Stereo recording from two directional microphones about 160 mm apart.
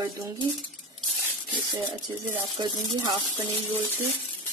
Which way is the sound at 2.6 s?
25° right (ahead or behind).